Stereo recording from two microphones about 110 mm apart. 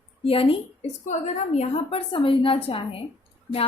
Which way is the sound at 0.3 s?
60° left (ahead or behind).